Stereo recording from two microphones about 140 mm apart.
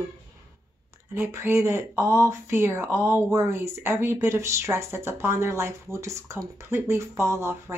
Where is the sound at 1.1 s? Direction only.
15° right (ahead or behind).